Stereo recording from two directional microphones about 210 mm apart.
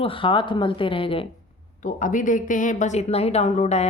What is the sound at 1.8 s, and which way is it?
Speech, 40° left (ahead or behind).